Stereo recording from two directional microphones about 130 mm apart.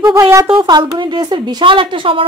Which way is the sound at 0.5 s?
35° right (ahead or behind).